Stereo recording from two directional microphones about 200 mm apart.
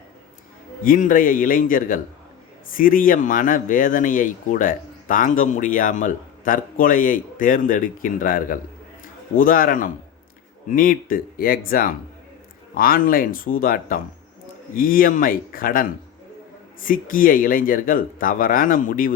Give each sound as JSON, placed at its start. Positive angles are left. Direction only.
{"t": 0.9, "sound": "speech", "side_deg": 45}